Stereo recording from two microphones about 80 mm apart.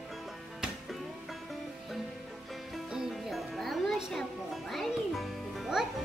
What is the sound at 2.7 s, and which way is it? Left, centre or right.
Music, centre.